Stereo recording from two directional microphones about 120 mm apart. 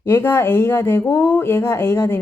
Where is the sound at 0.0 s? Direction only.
20° left (ahead or behind).